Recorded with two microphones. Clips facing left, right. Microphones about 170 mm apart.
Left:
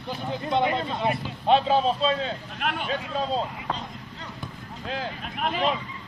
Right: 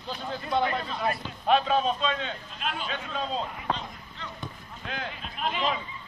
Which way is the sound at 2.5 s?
60° left (ahead or behind).